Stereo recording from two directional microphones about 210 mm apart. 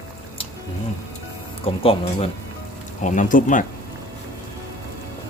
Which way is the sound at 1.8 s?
25° left (ahead or behind).